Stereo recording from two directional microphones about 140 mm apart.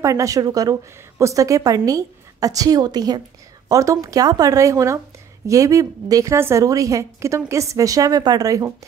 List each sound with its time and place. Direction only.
0.0 s a woman's voice: 25° right (ahead or behind)